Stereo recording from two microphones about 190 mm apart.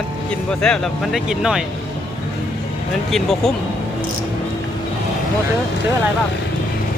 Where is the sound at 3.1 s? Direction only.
Centre (ahead or behind).